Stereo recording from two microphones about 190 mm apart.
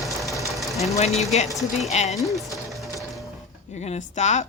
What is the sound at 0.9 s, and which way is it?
Speech, 35° left (ahead or behind).